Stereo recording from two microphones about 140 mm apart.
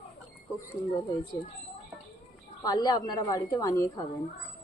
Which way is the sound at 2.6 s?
30° left (ahead or behind).